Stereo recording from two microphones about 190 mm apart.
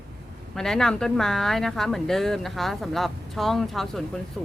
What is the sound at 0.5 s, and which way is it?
A woman's voice, 5° left (ahead or behind).